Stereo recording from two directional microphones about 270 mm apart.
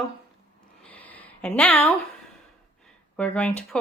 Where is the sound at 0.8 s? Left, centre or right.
Centre.